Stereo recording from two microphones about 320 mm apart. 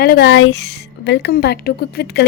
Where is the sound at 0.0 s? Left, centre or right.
Left.